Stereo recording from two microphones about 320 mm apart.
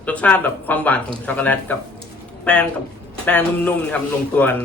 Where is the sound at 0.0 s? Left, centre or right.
Centre.